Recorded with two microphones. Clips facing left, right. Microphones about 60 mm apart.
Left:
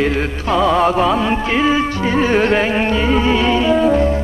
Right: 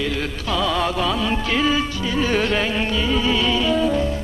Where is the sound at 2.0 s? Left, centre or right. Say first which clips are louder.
Left 6 dB; left.